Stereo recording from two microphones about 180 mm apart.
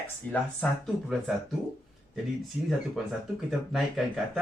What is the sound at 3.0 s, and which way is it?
Speech, centre (ahead or behind).